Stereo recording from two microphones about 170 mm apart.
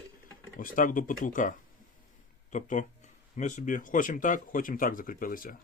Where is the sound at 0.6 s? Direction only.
50° left (ahead or behind).